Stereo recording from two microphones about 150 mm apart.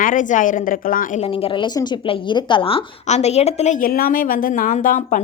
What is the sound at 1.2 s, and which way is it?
A woman's voice, 40° left (ahead or behind).